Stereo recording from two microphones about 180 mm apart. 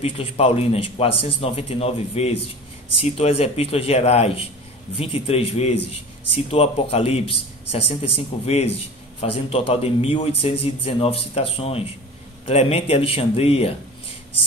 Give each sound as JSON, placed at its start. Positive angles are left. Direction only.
{"t": 0.0, "sound": "a man's voice", "side_deg": 35}